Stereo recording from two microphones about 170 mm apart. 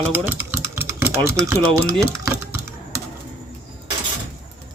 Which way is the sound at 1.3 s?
15° right (ahead or behind).